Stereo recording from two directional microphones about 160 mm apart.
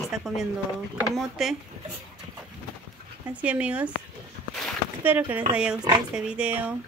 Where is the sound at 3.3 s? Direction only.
10° right (ahead or behind).